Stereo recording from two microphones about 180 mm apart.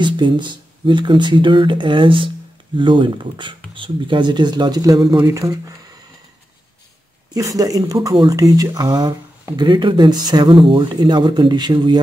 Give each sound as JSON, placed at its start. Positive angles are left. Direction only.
{"t": 0.0, "sound": "speech", "side_deg": -25}
{"t": 7.3, "sound": "speech", "side_deg": -20}